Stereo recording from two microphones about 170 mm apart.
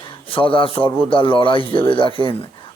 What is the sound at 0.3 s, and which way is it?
Speech, 30° left (ahead or behind).